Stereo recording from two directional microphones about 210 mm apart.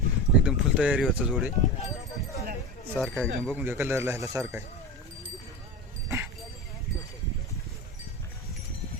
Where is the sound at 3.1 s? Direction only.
Centre (ahead or behind).